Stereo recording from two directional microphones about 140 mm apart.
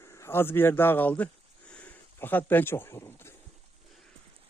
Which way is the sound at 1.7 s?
10° left (ahead or behind).